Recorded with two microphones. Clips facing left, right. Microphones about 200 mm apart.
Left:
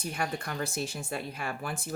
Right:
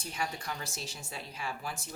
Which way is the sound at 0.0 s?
55° left (ahead or behind).